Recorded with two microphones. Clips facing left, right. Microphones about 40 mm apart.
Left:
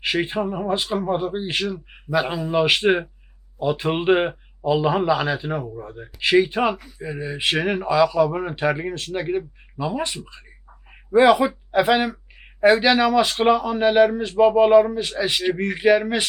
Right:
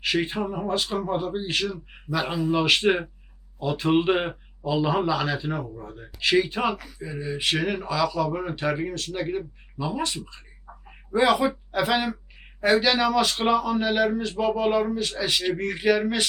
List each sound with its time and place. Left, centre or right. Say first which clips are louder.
0.0 s speech: left 3 dB; centre
11.1 s speech: left 6 dB; centre